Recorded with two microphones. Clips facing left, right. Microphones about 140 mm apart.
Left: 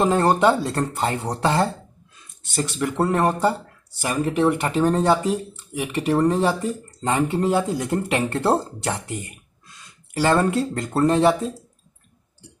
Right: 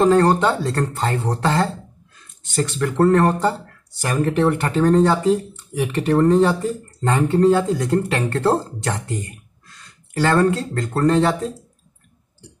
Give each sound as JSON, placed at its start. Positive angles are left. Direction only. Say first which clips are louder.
{"t": 0.0, "sound": "speech", "louder": "right 2 dB", "side_deg": 15}
{"t": 7.9, "sound": "speech", "louder": "right 2 dB", "side_deg": 20}
{"t": 8.8, "sound": "speech", "louder": "right 1 dB", "side_deg": 10}
{"t": 9.2, "sound": "a sound", "louder": "right 4 dB", "side_deg": 15}
{"t": 10.9, "sound": "speech", "louder": "right 1 dB", "side_deg": 10}